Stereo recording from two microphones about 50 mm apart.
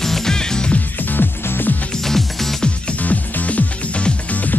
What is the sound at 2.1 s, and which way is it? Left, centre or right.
Music, centre.